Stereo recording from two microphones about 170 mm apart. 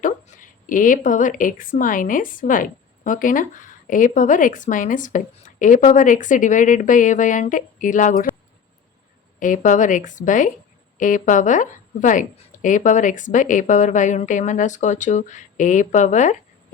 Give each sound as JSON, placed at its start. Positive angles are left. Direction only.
{"t": 0.0, "sound": "speech", "side_deg": 50}
{"t": 9.4, "sound": "speech", "side_deg": 50}